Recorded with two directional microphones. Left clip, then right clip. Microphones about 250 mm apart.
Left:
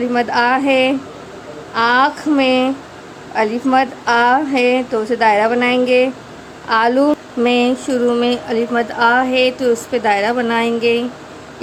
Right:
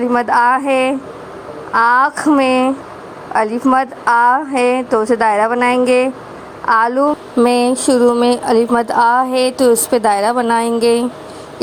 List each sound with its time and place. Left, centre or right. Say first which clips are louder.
0.0 s a woman's voice: right 3 dB; centre
7.0 s a woman's voice: right 2 dB; centre